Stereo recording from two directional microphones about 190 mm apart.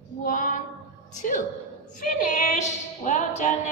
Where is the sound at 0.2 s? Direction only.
45° left (ahead or behind).